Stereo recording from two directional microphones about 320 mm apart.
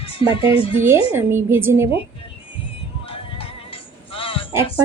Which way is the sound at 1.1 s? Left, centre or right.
Centre.